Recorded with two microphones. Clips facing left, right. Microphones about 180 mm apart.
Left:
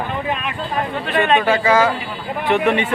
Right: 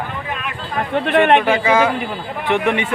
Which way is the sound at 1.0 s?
60° right (ahead or behind).